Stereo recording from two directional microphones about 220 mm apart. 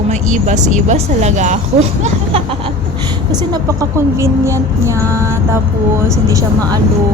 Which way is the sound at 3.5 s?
15° right (ahead or behind).